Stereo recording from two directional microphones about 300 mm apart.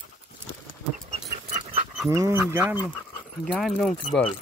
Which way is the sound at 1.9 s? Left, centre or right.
Centre.